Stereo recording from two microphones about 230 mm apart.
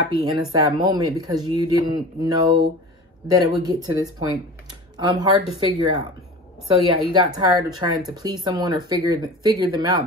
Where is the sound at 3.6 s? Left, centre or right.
Centre.